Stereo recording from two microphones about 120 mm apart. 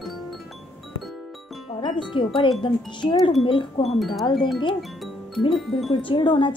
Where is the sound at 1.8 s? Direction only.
40° left (ahead or behind).